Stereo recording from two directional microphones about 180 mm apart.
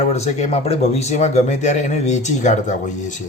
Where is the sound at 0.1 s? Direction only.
40° left (ahead or behind).